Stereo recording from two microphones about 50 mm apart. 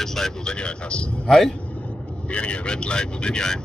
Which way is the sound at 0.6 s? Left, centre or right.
Centre.